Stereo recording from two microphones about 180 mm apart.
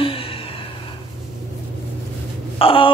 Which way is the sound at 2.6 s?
30° left (ahead or behind).